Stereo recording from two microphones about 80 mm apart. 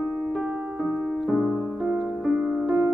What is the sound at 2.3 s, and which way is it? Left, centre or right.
Music, centre.